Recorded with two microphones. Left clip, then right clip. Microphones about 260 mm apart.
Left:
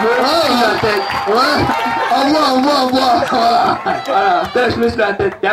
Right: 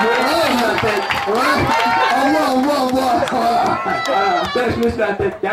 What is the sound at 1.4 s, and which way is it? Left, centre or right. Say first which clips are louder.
Speech: left 1 dB; centre.